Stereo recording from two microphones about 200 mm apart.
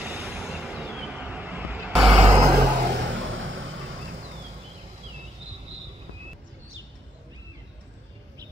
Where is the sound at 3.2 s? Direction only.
75° right (ahead or behind).